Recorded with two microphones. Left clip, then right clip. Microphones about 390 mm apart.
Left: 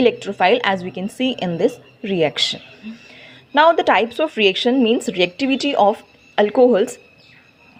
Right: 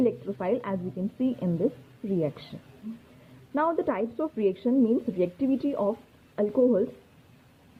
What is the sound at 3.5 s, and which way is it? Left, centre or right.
Speech, centre.